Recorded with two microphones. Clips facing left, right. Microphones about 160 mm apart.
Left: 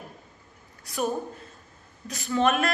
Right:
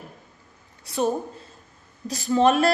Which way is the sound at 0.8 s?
30° right (ahead or behind).